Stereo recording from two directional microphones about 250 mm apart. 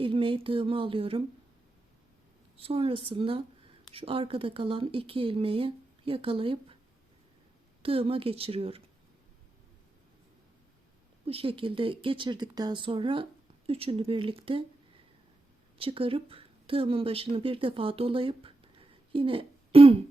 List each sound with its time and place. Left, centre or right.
0.0 s speech: right
2.6 s speech: right
7.8 s speech: right
11.3 s speech: right
15.8 s speech: right